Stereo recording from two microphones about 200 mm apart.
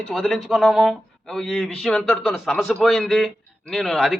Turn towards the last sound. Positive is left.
turn(degrees=0)  # may be behind; listen again after turning